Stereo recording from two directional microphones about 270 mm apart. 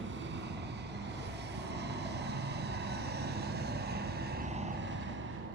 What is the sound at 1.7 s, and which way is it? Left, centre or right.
Vehicle, right.